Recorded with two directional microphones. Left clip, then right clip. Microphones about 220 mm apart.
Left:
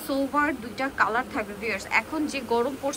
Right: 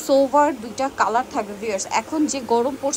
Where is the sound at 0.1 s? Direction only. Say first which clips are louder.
Right 9 dB; 15° right (ahead or behind).